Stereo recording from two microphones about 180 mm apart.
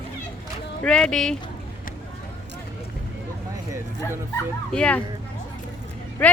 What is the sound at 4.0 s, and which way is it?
Speech, 15° left (ahead or behind).